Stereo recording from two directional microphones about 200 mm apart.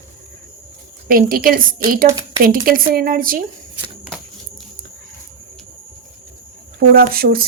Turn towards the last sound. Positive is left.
turn(degrees=-50)  # may be behind; listen again after turning